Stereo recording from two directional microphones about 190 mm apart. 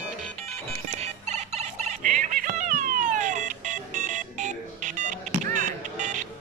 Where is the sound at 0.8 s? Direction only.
35° right (ahead or behind).